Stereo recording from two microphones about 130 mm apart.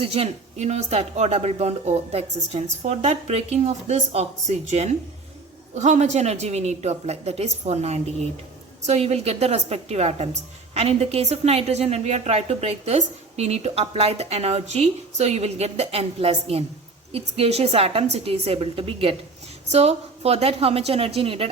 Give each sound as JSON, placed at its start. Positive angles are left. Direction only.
{"t": 0.0, "sound": "a woman's voice", "side_deg": -50}